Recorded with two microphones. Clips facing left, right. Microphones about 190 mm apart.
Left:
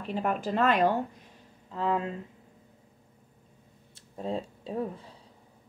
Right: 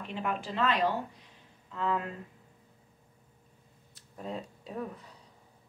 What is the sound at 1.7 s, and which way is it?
Speech, 30° left (ahead or behind).